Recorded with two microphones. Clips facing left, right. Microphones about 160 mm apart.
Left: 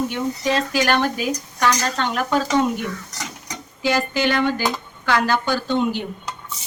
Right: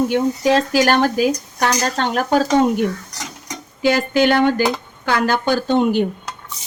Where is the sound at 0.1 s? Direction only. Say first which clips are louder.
Right 6 dB; 40° right (ahead or behind).